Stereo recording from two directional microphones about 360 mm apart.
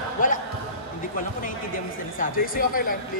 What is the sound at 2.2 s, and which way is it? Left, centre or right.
Speech, left.